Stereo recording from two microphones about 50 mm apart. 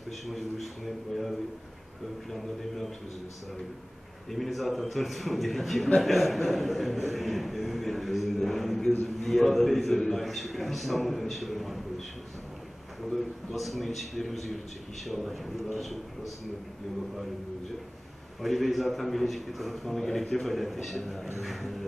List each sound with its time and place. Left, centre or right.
0.3 s a man's voice: centre
4.3 s a man's voice: centre
13.1 s a man's voice: centre
18.4 s a man's voice: centre